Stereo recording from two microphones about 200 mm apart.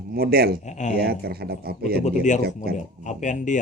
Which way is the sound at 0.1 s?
50° right (ahead or behind).